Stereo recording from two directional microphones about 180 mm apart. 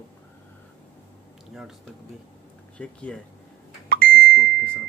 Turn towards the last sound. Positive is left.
turn(degrees=5)  # may be behind; listen again after turning